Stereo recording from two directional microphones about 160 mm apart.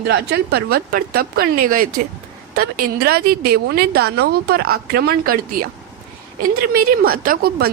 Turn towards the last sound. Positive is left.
turn(degrees=-60)  # may be behind; listen again after turning